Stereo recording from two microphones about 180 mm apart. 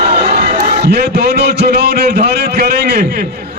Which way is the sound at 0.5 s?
55° right (ahead or behind).